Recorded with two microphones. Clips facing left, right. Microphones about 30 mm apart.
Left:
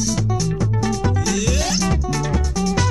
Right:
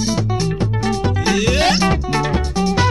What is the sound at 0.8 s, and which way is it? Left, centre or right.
Music, right.